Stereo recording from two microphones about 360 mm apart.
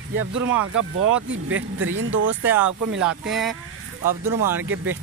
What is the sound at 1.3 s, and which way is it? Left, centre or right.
Speech, right.